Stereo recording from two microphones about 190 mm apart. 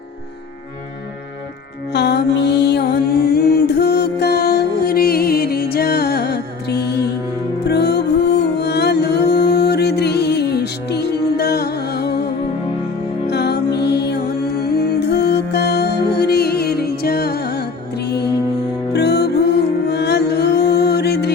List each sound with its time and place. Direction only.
1.9 s music: 60° left (ahead or behind)
13.3 s music: 60° left (ahead or behind)